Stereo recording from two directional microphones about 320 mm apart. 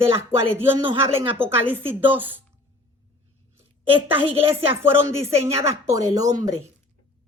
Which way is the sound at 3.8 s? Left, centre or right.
Centre.